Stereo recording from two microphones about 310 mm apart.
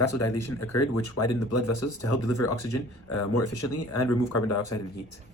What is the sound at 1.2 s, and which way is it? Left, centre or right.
Speech, left.